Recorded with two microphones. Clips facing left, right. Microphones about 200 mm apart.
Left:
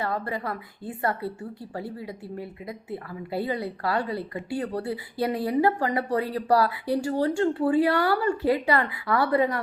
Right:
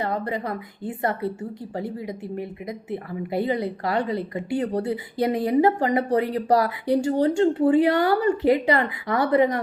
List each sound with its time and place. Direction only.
0.0 s a woman's voice: 20° right (ahead or behind)